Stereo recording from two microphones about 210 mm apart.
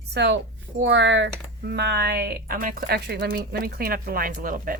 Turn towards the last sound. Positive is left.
turn(degrees=-40)  # may be behind; listen again after turning